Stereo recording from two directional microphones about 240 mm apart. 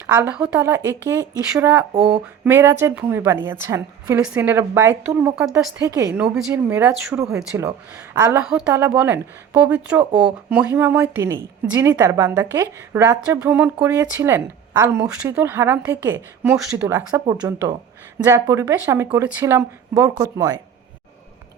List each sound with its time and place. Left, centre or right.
0.1 s speech: centre
2.0 s a sound: right
2.4 s speech: centre